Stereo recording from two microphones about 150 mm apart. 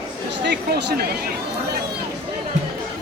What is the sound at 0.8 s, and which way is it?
Speech, 90° right.